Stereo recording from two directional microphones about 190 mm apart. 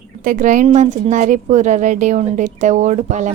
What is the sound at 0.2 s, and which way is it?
A woman's voice, 45° right (ahead or behind).